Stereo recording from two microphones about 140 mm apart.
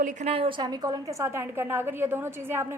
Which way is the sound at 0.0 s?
60° right (ahead or behind).